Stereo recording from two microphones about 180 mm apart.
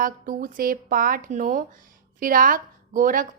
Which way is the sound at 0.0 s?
50° right (ahead or behind).